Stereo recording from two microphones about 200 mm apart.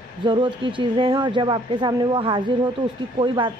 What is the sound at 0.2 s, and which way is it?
Speech, 25° right (ahead or behind).